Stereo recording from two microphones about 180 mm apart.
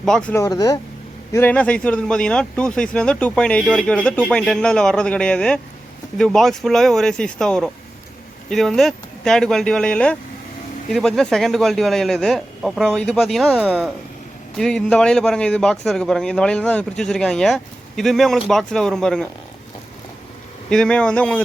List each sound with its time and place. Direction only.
0.0 s speech: 5° left (ahead or behind)
0.4 s a man's voice: 20° left (ahead or behind); by 19.3 s 5° left (ahead or behind)
20.7 s a man's voice: 5° left (ahead or behind)